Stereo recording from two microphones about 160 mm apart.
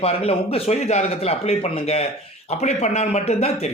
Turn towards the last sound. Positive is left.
turn(degrees=40)  # may be behind; listen again after turning